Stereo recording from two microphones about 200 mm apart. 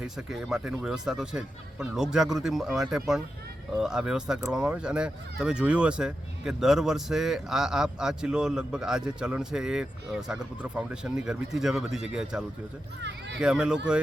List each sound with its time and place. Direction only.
0.2 s speech: centre (ahead or behind)
13.0 s a sound: 60° right (ahead or behind)
13.4 s speech: 5° right (ahead or behind)